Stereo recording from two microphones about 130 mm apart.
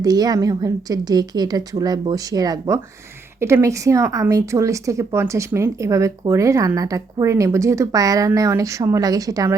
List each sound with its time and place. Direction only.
0.0 s a woman's voice: 30° right (ahead or behind)